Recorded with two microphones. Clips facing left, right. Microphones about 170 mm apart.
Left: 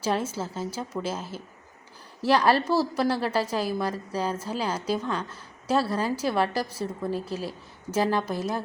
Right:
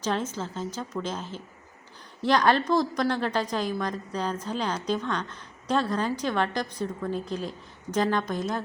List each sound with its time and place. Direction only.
0.0 s a woman's voice: 10° left (ahead or behind)